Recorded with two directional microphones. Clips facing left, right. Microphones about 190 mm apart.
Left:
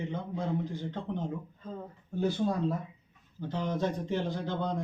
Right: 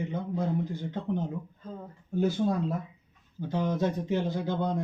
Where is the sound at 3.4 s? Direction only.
10° right (ahead or behind).